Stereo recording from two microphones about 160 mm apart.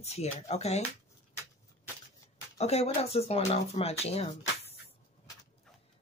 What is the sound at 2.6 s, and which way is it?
Speech, 40° left (ahead or behind).